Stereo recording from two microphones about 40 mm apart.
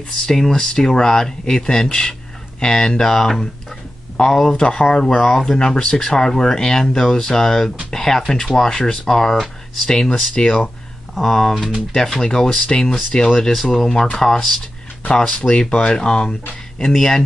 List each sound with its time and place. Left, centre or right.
0.3 s speech: centre
10.3 s speech: left
11.1 s speech: centre